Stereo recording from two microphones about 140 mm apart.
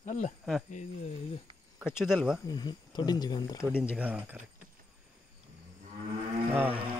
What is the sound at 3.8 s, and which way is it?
Speech, 10° right (ahead or behind).